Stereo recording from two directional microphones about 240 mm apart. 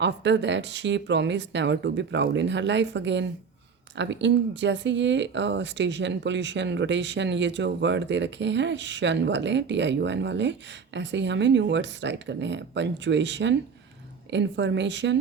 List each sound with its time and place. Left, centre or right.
0.0 s speech: right